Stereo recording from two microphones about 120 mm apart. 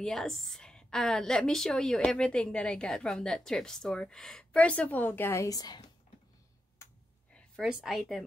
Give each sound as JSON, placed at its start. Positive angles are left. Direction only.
{"t": 0.0, "sound": "a woman's voice", "side_deg": 5}
{"t": 6.8, "sound": "a sound", "side_deg": 25}
{"t": 7.6, "sound": "a woman's voice", "side_deg": -5}